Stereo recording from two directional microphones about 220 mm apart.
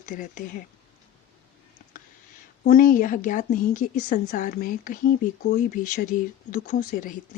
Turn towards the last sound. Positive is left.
turn(degrees=40)  # may be behind; listen again after turning